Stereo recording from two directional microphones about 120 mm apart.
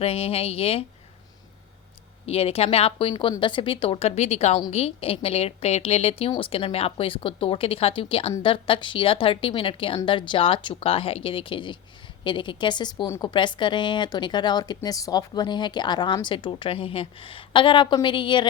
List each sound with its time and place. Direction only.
0.0 s a woman's voice: 55° left (ahead or behind)
2.2 s a woman's voice: 55° left (ahead or behind); by 13.1 s 40° left (ahead or behind)
13.1 s a woman's voice: 25° left (ahead or behind)
13.3 s speech: 40° left (ahead or behind)